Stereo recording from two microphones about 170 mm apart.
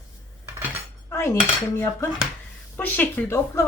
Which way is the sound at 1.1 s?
15° left (ahead or behind).